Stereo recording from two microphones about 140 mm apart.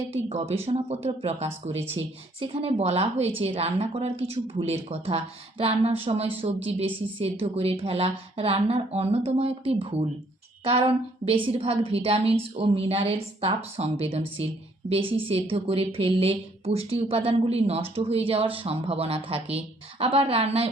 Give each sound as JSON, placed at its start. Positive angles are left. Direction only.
{"t": 0.1, "sound": "a woman's voice", "side_deg": -45}